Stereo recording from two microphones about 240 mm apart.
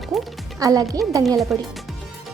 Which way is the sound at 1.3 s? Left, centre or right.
Centre.